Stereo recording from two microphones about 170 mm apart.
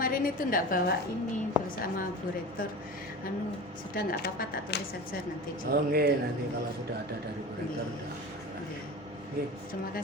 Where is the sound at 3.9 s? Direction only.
60° left (ahead or behind).